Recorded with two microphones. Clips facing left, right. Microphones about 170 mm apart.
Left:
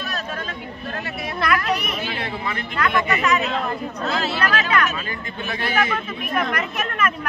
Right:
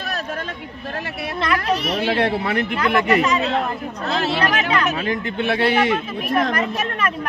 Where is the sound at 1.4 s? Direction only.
25° right (ahead or behind).